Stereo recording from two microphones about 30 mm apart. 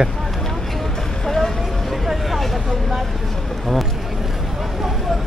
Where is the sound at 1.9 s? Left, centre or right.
Centre.